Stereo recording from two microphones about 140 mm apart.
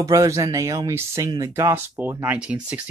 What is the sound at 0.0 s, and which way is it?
Speech, 25° right (ahead or behind).